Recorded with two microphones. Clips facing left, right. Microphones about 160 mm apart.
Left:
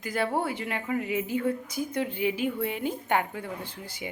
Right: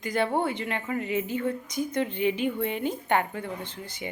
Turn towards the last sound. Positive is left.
turn(degrees=5)  # may be behind; listen again after turning